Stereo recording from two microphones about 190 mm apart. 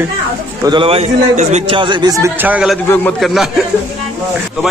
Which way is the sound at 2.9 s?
5° left (ahead or behind).